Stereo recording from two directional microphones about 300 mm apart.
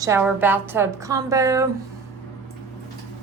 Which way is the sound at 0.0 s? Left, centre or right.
Centre.